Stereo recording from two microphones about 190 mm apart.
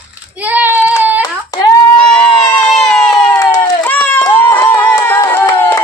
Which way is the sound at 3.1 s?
15° left (ahead or behind).